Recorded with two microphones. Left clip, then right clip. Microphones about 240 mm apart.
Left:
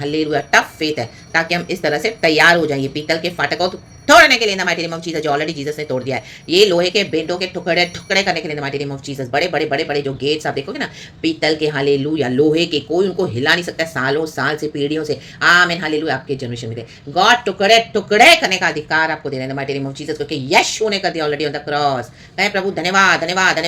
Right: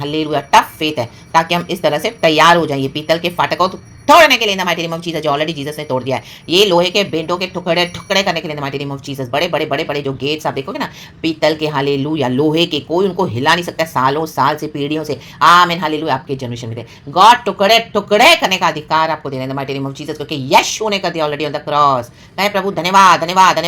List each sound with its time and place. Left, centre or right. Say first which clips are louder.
0.0 s speech: right 1 dB; centre